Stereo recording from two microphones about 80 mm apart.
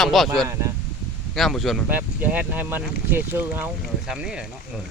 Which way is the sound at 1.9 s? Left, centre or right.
Centre.